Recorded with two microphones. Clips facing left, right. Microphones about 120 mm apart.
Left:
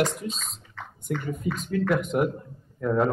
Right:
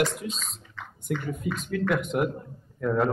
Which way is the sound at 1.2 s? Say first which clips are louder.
Left 1 dB; centre (ahead or behind).